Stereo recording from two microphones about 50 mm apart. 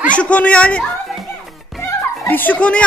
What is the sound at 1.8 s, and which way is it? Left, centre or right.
Music, left.